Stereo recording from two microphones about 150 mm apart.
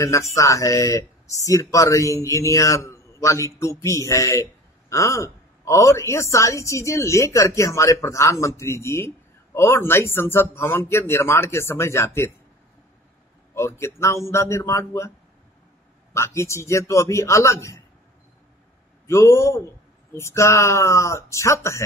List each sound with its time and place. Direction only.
0.0 s speech: 20° left (ahead or behind)
13.6 s speech: 20° left (ahead or behind)
19.0 s a man's voice: 20° left (ahead or behind)